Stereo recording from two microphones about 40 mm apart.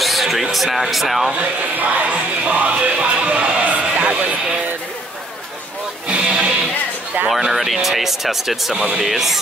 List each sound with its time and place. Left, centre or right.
0.0 s speech: centre
1.4 s music: right
6.0 s music: right
7.2 s speech: centre